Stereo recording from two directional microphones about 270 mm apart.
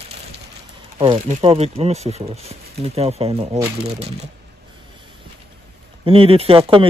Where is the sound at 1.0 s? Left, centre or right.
Right.